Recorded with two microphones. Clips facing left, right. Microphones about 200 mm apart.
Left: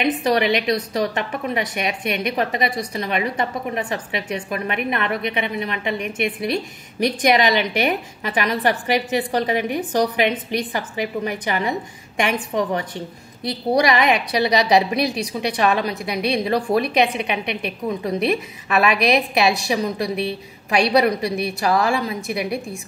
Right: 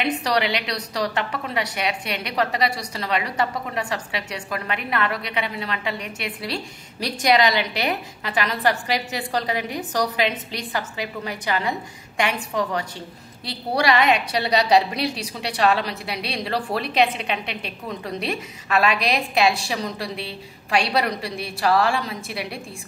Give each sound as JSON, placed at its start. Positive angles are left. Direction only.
{"t": 0.2, "sound": "a woman's voice", "side_deg": 20}